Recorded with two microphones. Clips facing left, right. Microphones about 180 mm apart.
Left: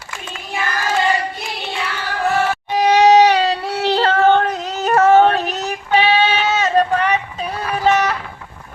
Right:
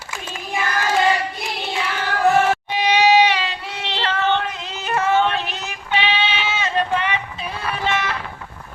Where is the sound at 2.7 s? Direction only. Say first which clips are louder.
Left 6 dB; 40° left (ahead or behind).